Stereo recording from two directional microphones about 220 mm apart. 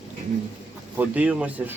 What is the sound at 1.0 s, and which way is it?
Speech, 5° right (ahead or behind).